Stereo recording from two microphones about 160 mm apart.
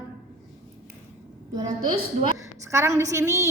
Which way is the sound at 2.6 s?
20° right (ahead or behind).